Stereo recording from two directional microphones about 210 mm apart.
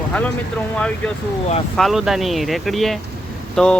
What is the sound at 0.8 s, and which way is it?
Speech, 5° left (ahead or behind).